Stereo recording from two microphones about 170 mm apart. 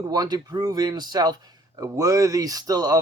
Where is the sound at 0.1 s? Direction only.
20° right (ahead or behind).